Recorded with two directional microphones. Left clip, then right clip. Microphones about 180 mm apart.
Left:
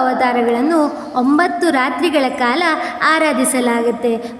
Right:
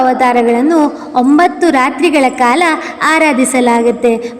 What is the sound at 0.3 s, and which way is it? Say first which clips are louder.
A woman's voice: right 5 dB; 20° right (ahead or behind).